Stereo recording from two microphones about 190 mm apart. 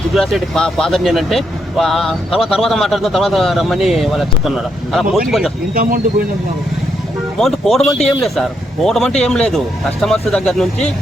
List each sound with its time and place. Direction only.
0.1 s speech: centre (ahead or behind)
5.7 s speech: 45° right (ahead or behind)
7.3 s speech: centre (ahead or behind)